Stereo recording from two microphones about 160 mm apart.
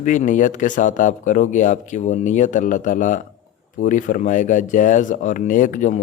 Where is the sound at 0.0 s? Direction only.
50° left (ahead or behind).